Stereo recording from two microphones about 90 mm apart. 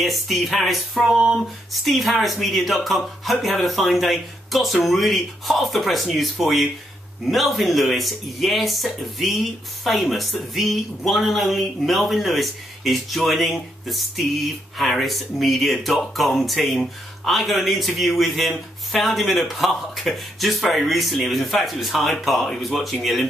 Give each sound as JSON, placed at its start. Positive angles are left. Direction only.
{"t": 0.0, "sound": "speech", "side_deg": 0}